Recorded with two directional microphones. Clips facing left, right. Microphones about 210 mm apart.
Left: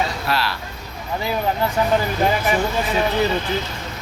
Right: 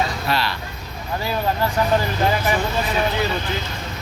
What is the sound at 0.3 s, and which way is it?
Speech, centre (ahead or behind).